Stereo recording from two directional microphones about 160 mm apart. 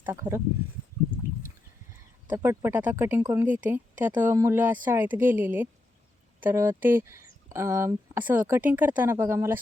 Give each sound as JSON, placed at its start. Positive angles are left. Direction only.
{"t": 0.0, "sound": "speech", "side_deg": -15}
{"t": 2.3, "sound": "speech", "side_deg": -15}